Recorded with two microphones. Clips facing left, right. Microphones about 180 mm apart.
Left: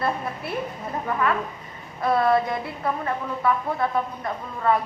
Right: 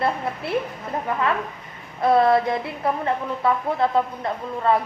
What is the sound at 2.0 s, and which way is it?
Speech, 25° right (ahead or behind).